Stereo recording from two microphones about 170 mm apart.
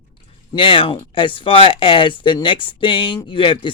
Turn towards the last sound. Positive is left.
turn(degrees=30)  # may be behind; listen again after turning